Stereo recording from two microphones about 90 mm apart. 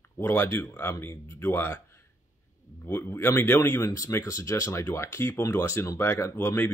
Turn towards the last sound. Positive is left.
turn(degrees=25)  # may be behind; listen again after turning